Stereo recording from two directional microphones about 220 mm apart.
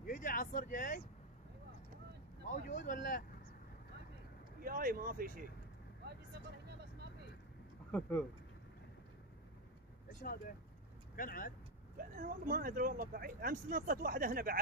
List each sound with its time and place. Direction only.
0.0 s vehicle: 40° left (ahead or behind)
2.4 s speech: 35° left (ahead or behind)
4.6 s speech: 40° right (ahead or behind)
6.0 s vehicle: 50° right (ahead or behind)
11.1 s speech: 40° left (ahead or behind)
12.0 s speech: 40° right (ahead or behind)